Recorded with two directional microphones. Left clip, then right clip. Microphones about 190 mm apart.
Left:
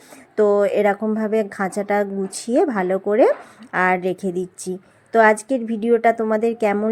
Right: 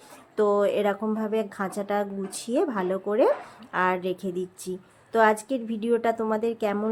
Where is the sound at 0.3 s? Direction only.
25° left (ahead or behind).